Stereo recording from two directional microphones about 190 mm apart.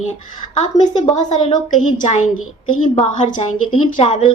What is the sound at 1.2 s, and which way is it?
A woman's voice, 35° left (ahead or behind).